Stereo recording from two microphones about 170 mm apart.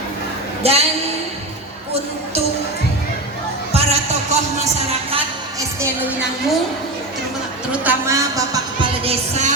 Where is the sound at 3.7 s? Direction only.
40° right (ahead or behind).